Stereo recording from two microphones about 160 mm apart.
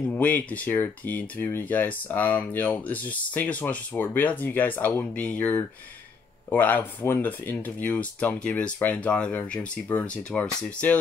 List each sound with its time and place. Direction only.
0.1 s speech: 10° left (ahead or behind)